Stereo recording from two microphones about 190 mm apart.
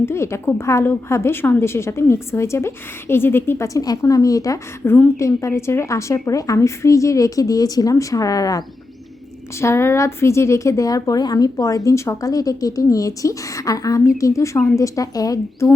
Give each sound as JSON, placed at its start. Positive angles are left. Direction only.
{"t": 0.0, "sound": "a woman's voice", "side_deg": 15}